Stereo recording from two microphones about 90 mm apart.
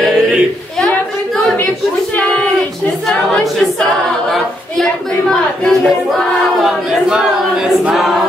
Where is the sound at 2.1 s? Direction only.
15° left (ahead or behind).